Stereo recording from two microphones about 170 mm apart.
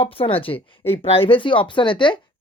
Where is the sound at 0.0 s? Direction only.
35° left (ahead or behind).